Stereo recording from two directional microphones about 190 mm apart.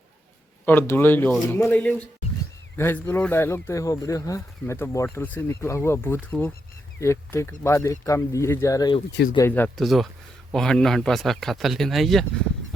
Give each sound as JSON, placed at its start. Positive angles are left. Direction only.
{"t": 0.6, "sound": "speech", "side_deg": 10}